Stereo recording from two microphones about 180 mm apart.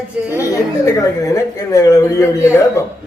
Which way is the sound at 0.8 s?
15° left (ahead or behind).